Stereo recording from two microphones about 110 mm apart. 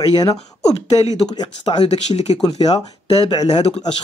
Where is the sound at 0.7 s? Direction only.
75° left (ahead or behind).